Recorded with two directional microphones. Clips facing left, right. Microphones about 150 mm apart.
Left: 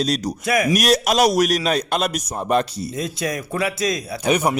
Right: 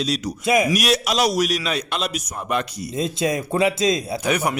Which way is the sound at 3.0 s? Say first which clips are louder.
Right 4 dB; 25° right (ahead or behind).